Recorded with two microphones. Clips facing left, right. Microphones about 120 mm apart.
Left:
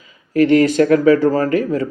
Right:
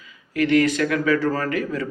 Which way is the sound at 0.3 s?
40° left (ahead or behind).